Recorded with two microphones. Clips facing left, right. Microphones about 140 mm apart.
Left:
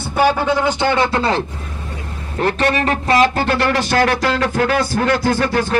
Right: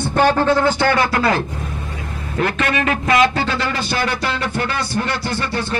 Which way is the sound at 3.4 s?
60° left (ahead or behind).